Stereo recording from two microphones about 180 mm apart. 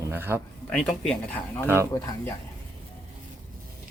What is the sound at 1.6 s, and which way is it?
Speech, 10° right (ahead or behind).